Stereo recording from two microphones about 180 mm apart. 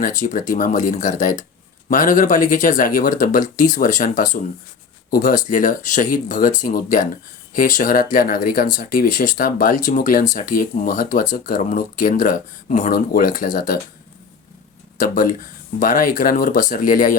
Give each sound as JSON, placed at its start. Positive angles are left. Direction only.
{"t": 0.2, "sound": "speech", "side_deg": 45}
{"t": 14.9, "sound": "speech", "side_deg": 50}